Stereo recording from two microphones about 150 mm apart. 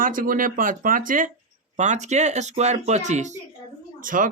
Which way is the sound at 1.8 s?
50° right (ahead or behind).